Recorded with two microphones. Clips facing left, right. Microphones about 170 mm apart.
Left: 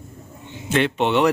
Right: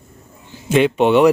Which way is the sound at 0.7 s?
15° right (ahead or behind).